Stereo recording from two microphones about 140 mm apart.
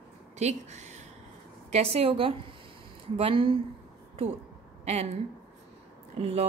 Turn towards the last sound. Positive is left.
turn(degrees=-50)  # may be behind; listen again after turning